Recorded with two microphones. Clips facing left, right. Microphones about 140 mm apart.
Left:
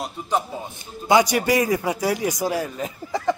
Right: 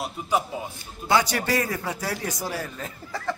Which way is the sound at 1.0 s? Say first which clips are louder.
Left 5 dB; 15° left (ahead or behind).